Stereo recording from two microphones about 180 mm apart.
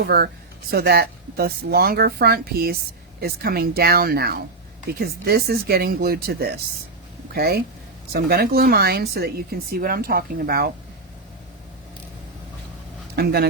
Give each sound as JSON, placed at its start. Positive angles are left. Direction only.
{"t": 0.0, "sound": "speech", "side_deg": -60}
{"t": 13.1, "sound": "speech", "side_deg": -60}